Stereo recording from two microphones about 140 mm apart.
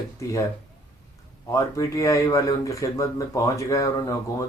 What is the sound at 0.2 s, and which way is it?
Speech, 20° left (ahead or behind).